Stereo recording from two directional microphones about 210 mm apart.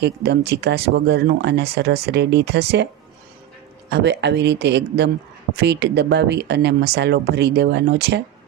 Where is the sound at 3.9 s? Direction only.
55° right (ahead or behind).